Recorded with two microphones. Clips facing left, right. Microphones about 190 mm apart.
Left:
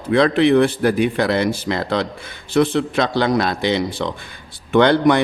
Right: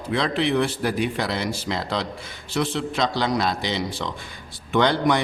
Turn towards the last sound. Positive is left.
turn(degrees=60)  # may be behind; listen again after turning